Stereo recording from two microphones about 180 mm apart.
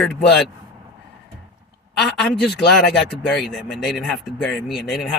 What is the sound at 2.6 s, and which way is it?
Speech, 70° left (ahead or behind).